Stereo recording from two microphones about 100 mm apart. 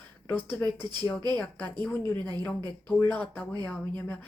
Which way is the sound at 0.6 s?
45° right (ahead or behind).